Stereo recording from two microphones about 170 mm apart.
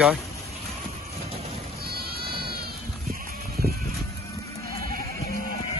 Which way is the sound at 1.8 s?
65° right (ahead or behind).